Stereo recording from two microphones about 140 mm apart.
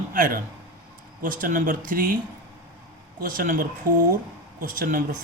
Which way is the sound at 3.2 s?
85° right.